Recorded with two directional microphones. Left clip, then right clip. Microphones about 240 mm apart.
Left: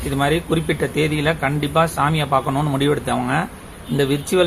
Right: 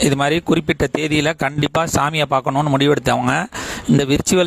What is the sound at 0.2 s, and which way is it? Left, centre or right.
Speech, right.